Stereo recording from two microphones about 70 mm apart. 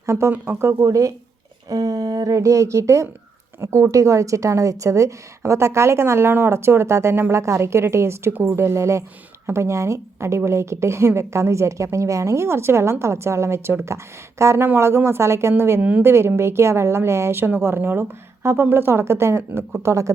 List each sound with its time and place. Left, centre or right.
0.0 s a woman's voice: right
2.3 s a woman's voice: right
15.8 s a woman's voice: right
16.0 s a woman's voice: right